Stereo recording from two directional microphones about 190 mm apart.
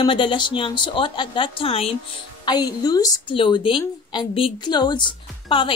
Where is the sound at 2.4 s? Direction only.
20° left (ahead or behind).